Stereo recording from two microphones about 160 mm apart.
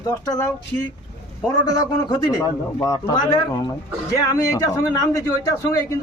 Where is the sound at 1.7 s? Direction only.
25° left (ahead or behind).